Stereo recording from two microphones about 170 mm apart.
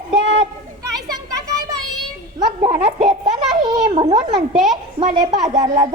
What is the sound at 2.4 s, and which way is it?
Speech, 35° right (ahead or behind).